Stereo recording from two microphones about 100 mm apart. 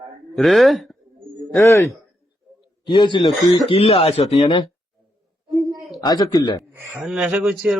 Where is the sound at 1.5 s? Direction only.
30° left (ahead or behind).